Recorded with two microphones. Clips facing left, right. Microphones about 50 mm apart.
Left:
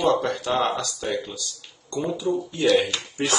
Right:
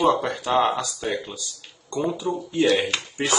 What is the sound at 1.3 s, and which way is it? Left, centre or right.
Cash register, right.